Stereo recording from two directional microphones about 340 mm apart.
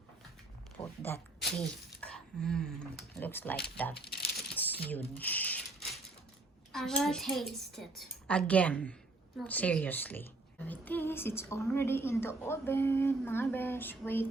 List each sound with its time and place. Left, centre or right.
0.8 s a woman's voice: centre
4.5 s a sound: centre
6.7 s a child's voice: centre